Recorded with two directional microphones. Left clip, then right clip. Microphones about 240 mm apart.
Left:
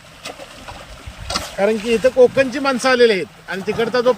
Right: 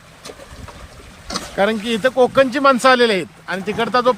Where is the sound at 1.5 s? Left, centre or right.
Centre.